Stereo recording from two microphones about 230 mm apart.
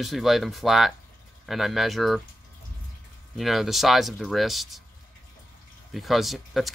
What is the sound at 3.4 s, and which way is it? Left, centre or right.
Speech, centre.